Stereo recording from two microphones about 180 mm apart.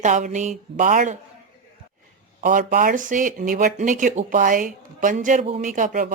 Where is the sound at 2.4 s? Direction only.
50° right (ahead or behind).